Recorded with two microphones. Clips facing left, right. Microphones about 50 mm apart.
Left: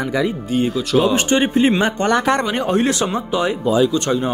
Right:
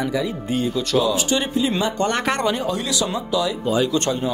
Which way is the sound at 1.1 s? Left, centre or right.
Left.